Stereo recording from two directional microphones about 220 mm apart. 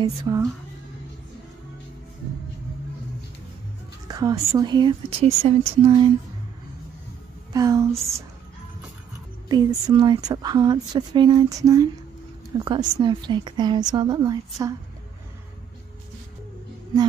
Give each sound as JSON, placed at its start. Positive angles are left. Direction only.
{"t": 0.0, "sound": "speech", "side_deg": -15}
{"t": 4.1, "sound": "speech", "side_deg": -15}
{"t": 7.5, "sound": "speech", "side_deg": -15}
{"t": 7.9, "sound": "speech", "side_deg": -30}
{"t": 9.5, "sound": "speech", "side_deg": -20}